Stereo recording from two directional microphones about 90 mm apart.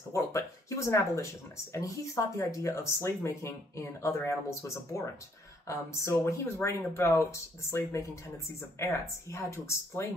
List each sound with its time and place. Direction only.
0.1 s speech: 35° left (ahead or behind)